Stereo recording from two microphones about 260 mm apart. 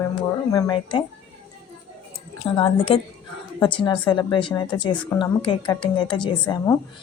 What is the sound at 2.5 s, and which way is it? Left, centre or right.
A woman's voice, centre.